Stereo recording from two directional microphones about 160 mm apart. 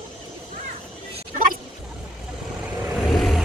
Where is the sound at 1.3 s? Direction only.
60° right (ahead or behind).